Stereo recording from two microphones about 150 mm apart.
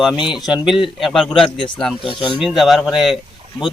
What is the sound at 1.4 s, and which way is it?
Speech, 35° left (ahead or behind).